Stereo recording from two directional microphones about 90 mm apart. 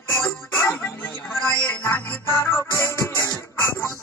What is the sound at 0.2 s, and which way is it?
Music, 25° left (ahead or behind).